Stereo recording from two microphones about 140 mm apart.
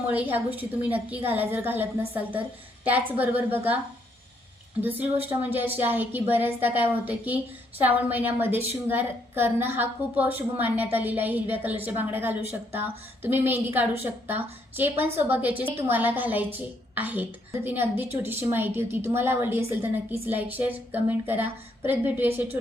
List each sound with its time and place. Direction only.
0.1 s a woman's voice: 15° right (ahead or behind)
4.8 s a woman's voice: 15° right (ahead or behind)